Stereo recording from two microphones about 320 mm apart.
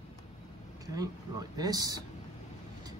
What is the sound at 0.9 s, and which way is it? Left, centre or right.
Speech, centre.